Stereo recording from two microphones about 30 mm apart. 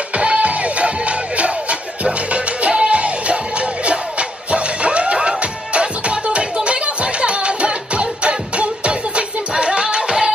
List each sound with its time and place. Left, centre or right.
0.2 s music: right